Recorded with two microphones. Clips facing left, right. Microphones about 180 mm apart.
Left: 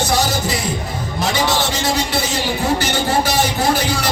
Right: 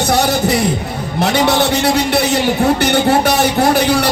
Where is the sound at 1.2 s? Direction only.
65° right (ahead or behind).